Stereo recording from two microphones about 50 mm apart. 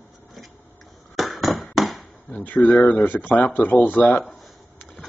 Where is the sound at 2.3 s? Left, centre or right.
Left.